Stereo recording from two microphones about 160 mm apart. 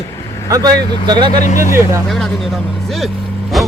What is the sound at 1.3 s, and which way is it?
Speech, 50° left (ahead or behind).